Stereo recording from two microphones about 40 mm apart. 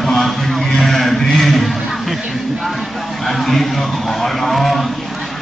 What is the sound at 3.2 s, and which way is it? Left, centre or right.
A man's voice, centre.